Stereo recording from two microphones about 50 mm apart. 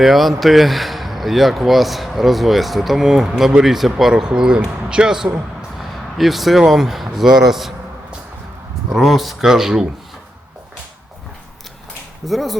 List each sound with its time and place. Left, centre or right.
0.0 s speech: centre
5.7 s a sound: centre
6.7 s speech: centre
9.0 s speech: centre
12.2 s speech: centre